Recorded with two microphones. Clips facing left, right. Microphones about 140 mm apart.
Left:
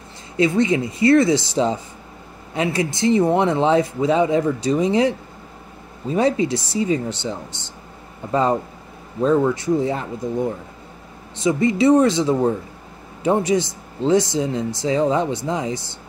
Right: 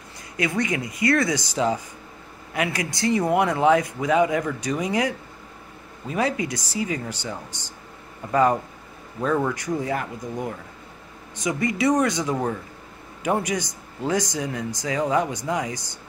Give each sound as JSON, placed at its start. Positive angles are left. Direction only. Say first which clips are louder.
{"t": 0.4, "sound": "speech", "louder": "left 7 dB", "side_deg": 25}